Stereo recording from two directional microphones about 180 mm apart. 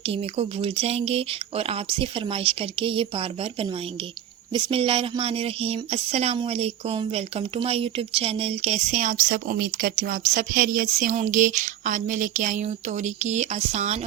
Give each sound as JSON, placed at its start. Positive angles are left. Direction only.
{"t": 0.0, "sound": "speech", "side_deg": -35}